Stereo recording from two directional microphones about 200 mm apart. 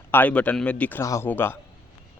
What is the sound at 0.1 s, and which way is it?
A man's voice, 10° left (ahead or behind).